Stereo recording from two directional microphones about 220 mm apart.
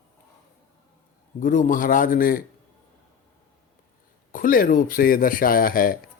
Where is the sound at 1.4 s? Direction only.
35° left (ahead or behind).